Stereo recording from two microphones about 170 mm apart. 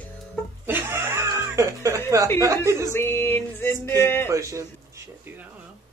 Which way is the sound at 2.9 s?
15° left (ahead or behind).